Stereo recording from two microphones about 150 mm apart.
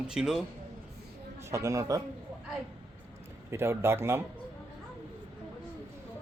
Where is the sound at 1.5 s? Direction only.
20° right (ahead or behind).